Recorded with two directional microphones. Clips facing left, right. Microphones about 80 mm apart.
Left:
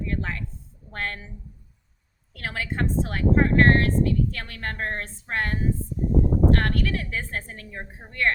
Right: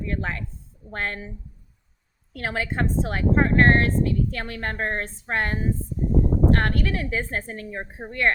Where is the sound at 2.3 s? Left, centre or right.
Right.